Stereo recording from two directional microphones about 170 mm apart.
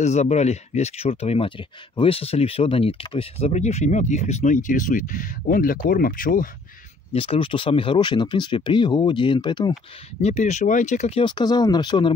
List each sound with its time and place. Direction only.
0.0 s speech: 40° left (ahead or behind)
7.1 s speech: 35° left (ahead or behind)
10.2 s speech: 40° left (ahead or behind); by 12.1 s 25° left (ahead or behind)